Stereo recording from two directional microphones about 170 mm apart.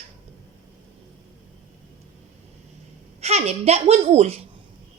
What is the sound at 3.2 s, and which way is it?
A woman's voice, 40° right (ahead or behind).